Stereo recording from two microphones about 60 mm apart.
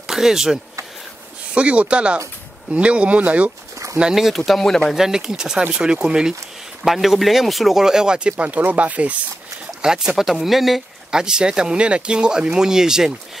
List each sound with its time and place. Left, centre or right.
0.0 s speech: centre
1.5 s speech: centre
4.1 s speech: centre
4.5 s speech: centre
4.9 s speech: centre; by 9.1 s right
9.8 s speech: centre